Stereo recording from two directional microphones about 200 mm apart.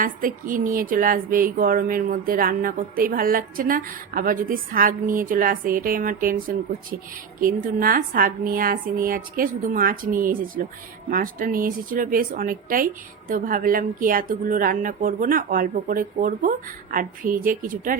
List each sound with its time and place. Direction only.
0.0 s speech: 45° right (ahead or behind)
7.3 s speech: 45° right (ahead or behind)